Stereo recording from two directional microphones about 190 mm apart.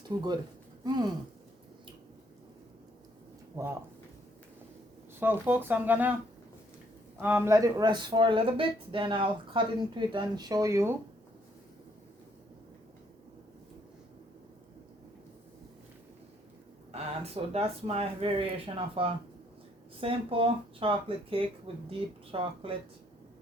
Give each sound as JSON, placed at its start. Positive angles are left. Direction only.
{"t": 0.1, "sound": "speech", "side_deg": -20}
{"t": 3.5, "sound": "speech", "side_deg": -15}
{"t": 5.2, "sound": "speech", "side_deg": -10}
{"t": 7.2, "sound": "speech", "side_deg": -10}
{"t": 16.9, "sound": "speech", "side_deg": -30}